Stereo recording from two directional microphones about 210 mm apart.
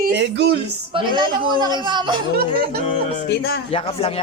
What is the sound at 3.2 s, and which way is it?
Speech, 50° left (ahead or behind).